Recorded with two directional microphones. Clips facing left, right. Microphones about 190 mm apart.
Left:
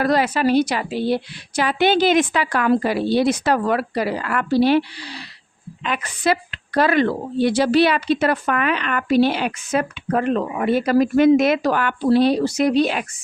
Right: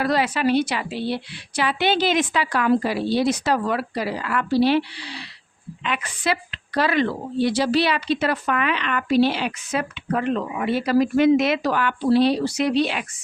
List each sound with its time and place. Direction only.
0.0 s a woman's voice: 45° left (ahead or behind)